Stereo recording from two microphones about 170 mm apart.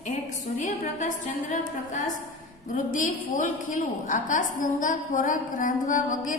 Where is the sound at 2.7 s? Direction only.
50° left (ahead or behind).